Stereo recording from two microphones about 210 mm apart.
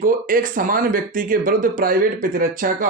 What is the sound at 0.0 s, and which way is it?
Speech, 40° right (ahead or behind).